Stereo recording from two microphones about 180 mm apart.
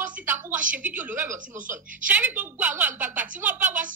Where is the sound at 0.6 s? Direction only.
45° right (ahead or behind).